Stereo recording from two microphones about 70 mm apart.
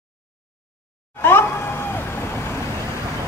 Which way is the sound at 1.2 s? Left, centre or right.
Left.